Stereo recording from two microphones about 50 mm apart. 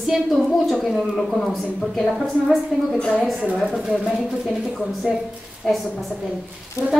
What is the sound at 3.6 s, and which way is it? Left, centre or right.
A woman's voice, centre.